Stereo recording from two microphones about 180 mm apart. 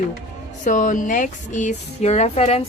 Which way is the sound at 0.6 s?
45° left (ahead or behind).